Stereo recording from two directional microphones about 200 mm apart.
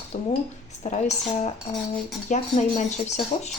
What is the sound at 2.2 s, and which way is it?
Speech, 40° left (ahead or behind).